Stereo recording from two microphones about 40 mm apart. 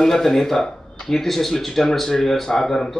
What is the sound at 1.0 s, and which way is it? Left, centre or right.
Speech, centre.